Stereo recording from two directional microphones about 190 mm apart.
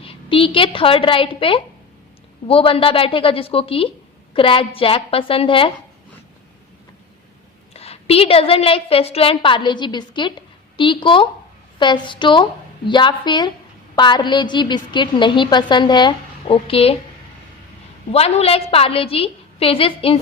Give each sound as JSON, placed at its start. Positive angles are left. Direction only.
{"t": 0.0, "sound": "a woman's voice", "side_deg": 30}
{"t": 7.7, "sound": "a woman's voice", "side_deg": 30}
{"t": 18.1, "sound": "a woman's voice", "side_deg": 35}